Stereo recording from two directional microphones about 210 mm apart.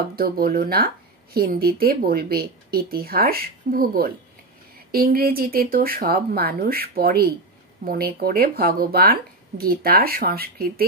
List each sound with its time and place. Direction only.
0.1 s speech: 45° right (ahead or behind)